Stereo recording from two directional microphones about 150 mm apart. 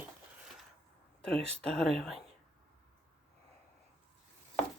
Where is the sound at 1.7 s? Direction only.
5° left (ahead or behind).